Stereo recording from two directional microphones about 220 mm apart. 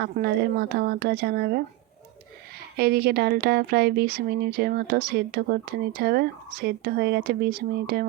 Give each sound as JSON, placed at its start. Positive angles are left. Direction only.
{"t": 0.0, "sound": "speech", "side_deg": -45}
{"t": 2.7, "sound": "speech", "side_deg": -45}